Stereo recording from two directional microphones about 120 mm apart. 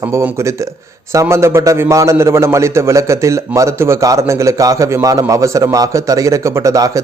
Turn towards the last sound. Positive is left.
turn(degrees=-30)  # may be behind; listen again after turning